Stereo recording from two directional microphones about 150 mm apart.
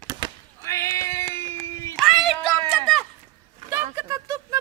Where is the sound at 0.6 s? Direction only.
20° left (ahead or behind).